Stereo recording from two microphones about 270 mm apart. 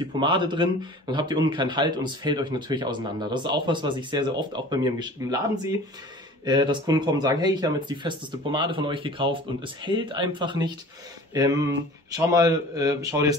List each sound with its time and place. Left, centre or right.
0.0 s speech: centre